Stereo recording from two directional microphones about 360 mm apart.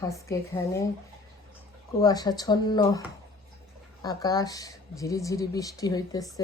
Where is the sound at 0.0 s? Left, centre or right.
Centre.